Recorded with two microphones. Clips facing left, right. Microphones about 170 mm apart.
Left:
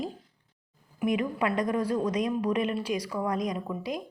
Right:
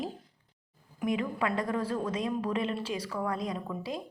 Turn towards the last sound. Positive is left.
turn(degrees=15)  # may be behind; listen again after turning